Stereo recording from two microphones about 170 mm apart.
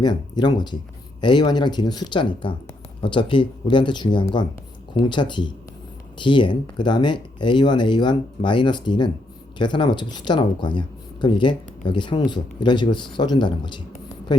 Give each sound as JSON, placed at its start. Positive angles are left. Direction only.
{"t": 0.0, "sound": "speech", "side_deg": 25}